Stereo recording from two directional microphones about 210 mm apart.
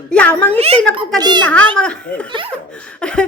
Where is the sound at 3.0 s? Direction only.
5° left (ahead or behind).